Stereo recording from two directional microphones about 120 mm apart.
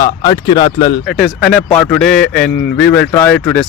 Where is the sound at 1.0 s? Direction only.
5° left (ahead or behind).